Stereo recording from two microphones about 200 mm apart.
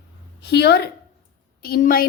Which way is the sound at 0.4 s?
55° left (ahead or behind).